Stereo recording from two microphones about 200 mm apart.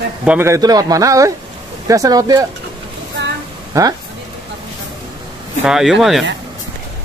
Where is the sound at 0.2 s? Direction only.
10° right (ahead or behind).